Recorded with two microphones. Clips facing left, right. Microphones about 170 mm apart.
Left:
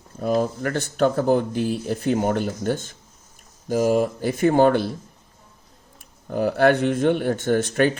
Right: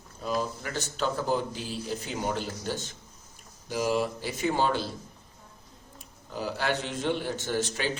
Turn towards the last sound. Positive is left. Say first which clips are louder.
# left 10 dB
turn(degrees=55)  # may be behind; listen again after turning